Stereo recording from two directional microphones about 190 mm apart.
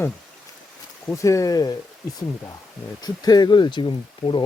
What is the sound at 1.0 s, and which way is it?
Speech, 15° left (ahead or behind).